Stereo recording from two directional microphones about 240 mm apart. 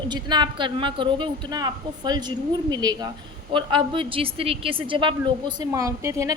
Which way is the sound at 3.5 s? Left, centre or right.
Right.